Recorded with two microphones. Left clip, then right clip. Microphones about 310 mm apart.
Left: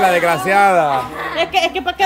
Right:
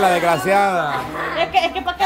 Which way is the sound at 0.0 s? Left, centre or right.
Centre.